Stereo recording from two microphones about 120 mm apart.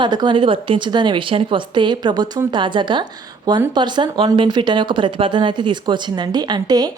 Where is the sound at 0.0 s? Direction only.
40° right (ahead or behind).